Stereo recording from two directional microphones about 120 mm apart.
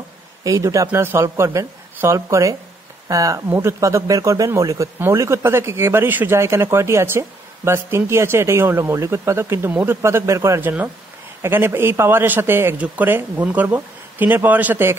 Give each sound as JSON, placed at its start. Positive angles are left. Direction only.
{"t": 0.4, "sound": "a man's voice", "side_deg": -25}